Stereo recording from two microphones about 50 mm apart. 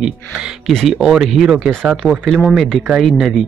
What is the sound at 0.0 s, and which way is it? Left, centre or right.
Speech, centre.